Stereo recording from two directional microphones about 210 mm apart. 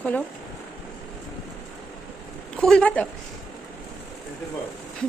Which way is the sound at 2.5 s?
5° left (ahead or behind).